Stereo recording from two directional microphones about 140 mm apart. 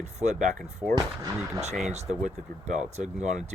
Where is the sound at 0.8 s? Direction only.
5° right (ahead or behind).